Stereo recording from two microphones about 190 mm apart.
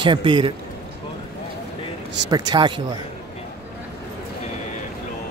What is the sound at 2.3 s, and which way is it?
Speech, 20° right (ahead or behind).